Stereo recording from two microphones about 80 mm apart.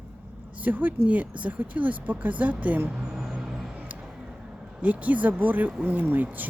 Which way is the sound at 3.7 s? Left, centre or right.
Centre.